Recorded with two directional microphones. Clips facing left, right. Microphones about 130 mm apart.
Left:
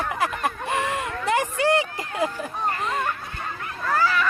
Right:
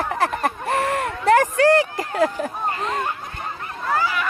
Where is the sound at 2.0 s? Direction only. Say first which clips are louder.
Right 5 dB; 40° right (ahead or behind).